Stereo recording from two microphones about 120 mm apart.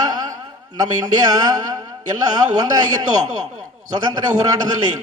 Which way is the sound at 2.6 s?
35° right (ahead or behind).